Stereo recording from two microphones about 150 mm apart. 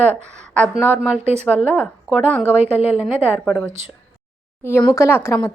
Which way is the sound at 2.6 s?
10° right (ahead or behind).